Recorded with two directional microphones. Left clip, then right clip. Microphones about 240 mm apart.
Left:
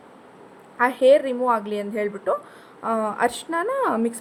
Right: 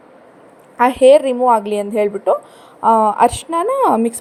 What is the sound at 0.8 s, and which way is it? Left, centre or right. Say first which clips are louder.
A woman's voice: right 7 dB; right.